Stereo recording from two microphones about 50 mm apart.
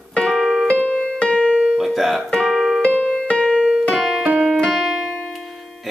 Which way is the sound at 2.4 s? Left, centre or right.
Centre.